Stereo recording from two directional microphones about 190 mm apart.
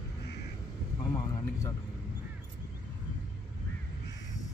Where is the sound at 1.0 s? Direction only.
20° left (ahead or behind).